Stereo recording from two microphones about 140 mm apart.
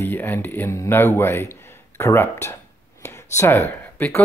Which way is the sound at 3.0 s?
20° left (ahead or behind).